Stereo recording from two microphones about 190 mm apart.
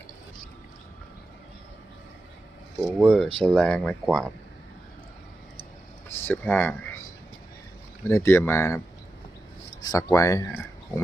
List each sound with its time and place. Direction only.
2.8 s speech: 5° right (ahead or behind)
6.1 s speech: 10° left (ahead or behind)
8.0 s speech: 15° left (ahead or behind)
9.8 s speech: 15° left (ahead or behind)